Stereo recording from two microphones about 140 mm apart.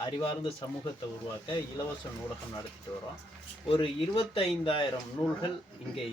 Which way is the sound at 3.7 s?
40° left (ahead or behind).